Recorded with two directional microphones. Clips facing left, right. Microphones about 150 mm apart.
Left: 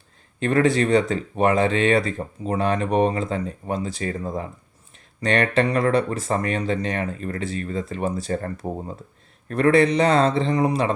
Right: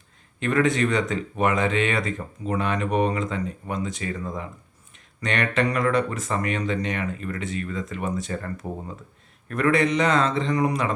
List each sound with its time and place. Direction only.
0.3 s speech: 35° left (ahead or behind)